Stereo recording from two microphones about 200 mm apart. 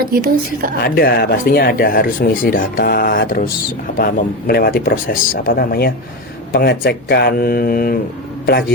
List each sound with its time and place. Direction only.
0.0 s a woman's voice: 50° right (ahead or behind)
0.9 s speech: 50° left (ahead or behind)